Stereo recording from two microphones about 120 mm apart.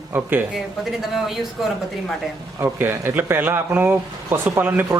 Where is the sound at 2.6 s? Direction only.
20° right (ahead or behind).